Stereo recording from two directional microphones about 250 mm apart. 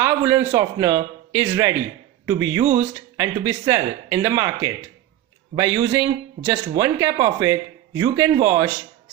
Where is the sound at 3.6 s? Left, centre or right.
Centre.